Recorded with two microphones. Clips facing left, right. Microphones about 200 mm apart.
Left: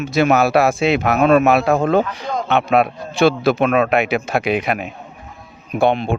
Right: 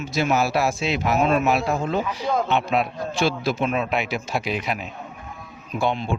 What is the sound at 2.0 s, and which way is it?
Speech, 5° right (ahead or behind).